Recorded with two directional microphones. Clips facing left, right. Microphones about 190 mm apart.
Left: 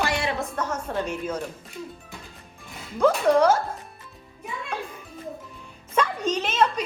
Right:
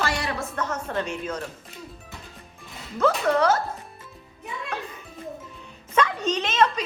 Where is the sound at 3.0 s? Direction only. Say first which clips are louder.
Left 3 dB; 10° left (ahead or behind).